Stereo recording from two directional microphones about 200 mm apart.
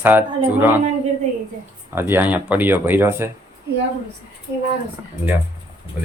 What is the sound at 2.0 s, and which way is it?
Speech, 10° right (ahead or behind).